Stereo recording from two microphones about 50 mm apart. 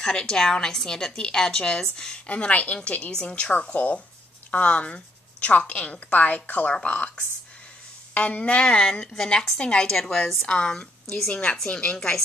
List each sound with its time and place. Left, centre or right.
0.0 s a woman's voice: centre
2.2 s a woman's voice: left
8.1 s a woman's voice: left
9.1 s a woman's voice: centre
9.6 s a woman's voice: centre